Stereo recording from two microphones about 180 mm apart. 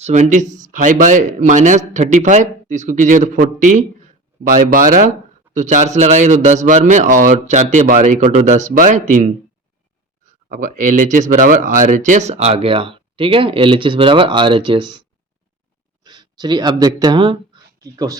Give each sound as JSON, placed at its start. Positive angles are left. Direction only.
{"t": 0.0, "sound": "speech", "side_deg": -40}
{"t": 10.5, "sound": "speech", "side_deg": -45}
{"t": 16.0, "sound": "speech", "side_deg": -25}